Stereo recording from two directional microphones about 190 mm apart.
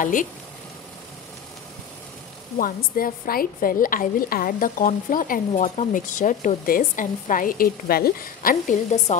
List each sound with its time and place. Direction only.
0.0 s a woman's voice: 45° left (ahead or behind)
2.6 s a woman's voice: 50° left (ahead or behind)